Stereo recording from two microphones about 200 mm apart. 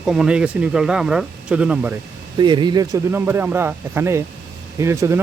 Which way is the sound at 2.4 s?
20° right (ahead or behind).